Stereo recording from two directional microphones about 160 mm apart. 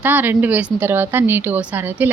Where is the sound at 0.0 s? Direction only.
10° right (ahead or behind).